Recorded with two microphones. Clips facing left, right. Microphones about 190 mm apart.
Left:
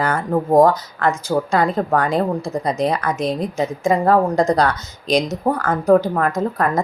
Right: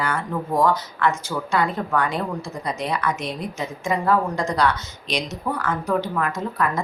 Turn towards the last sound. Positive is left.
turn(degrees=40)  # may be behind; listen again after turning